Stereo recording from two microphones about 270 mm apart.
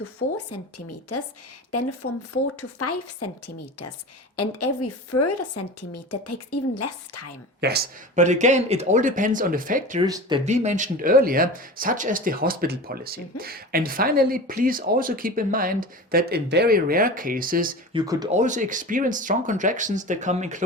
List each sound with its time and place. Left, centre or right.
0.2 s a woman's voice: left
1.1 s a woman's voice: left
6.7 s a woman's voice: left
7.6 s speech: right
10.0 s speech: centre; by 17.7 s right
17.9 s speech: centre
18.3 s speech: right